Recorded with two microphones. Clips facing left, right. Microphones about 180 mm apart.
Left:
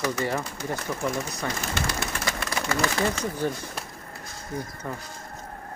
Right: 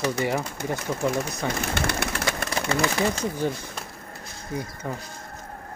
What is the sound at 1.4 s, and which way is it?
Bird, 60° right (ahead or behind).